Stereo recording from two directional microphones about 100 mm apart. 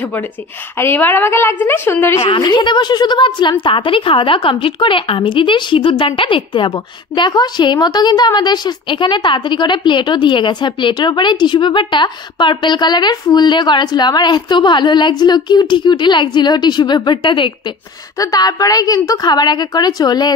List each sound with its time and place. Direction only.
0.7 s a woman's voice: 20° left (ahead or behind)
2.1 s a woman's voice: 60° left (ahead or behind)
6.7 s a woman's voice: 45° left (ahead or behind)
18.1 s a woman's voice: 35° left (ahead or behind)